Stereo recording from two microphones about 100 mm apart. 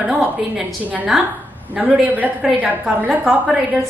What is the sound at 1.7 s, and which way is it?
A woman's voice, 15° right (ahead or behind).